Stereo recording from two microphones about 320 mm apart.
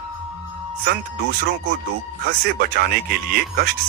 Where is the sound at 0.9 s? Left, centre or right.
Right.